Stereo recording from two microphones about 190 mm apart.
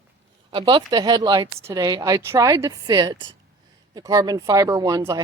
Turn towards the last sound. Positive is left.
turn(degrees=-20)  # may be behind; listen again after turning